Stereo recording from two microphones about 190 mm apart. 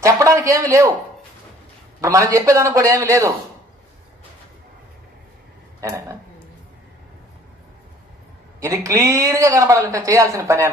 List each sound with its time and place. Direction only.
0.0 s speech: 15° right (ahead or behind)
2.0 s speech: 15° right (ahead or behind)
5.8 s speech: 15° right (ahead or behind)
8.5 s speech: 15° right (ahead or behind)